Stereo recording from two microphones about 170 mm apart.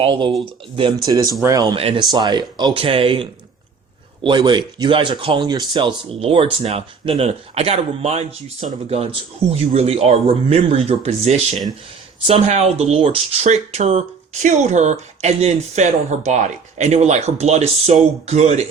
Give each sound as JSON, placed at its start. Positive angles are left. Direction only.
{"t": 0.0, "sound": "speech", "side_deg": -30}